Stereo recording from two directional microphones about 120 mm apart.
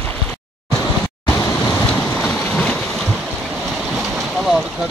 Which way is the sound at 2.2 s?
5° left (ahead or behind).